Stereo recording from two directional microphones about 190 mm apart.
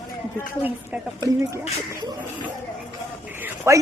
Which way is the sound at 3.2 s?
10° right (ahead or behind).